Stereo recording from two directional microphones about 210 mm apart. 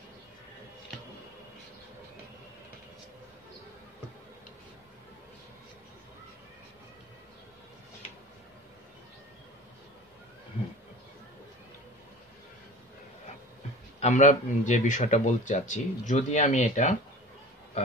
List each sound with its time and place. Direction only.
13.9 s speech: 35° left (ahead or behind)